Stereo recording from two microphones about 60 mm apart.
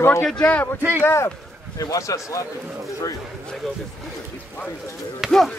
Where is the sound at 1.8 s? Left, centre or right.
Left.